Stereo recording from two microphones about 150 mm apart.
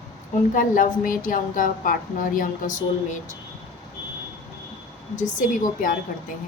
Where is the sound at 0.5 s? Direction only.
65° left (ahead or behind).